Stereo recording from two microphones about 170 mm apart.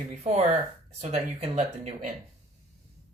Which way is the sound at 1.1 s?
40° right (ahead or behind).